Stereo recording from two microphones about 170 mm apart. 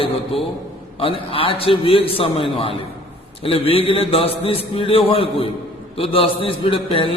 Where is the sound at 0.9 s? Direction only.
30° left (ahead or behind).